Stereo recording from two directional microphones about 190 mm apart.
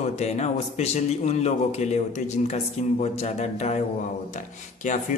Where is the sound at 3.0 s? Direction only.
35° left (ahead or behind).